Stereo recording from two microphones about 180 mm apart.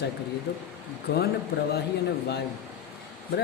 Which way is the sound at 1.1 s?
65° left (ahead or behind).